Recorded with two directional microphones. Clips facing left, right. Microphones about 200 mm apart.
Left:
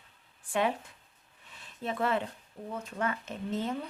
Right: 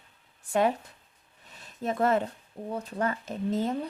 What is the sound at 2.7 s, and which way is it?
Speech, 35° right (ahead or behind).